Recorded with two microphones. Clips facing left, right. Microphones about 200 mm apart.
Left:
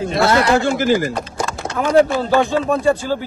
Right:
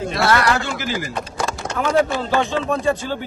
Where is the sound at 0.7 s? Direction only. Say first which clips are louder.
Left 10 dB; 50° left (ahead or behind).